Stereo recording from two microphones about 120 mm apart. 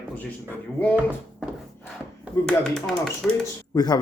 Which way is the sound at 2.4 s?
5° left (ahead or behind).